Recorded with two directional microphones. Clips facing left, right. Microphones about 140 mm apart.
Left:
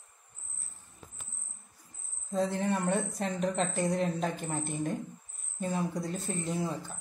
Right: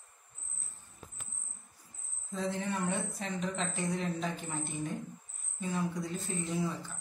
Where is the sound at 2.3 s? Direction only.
40° left (ahead or behind).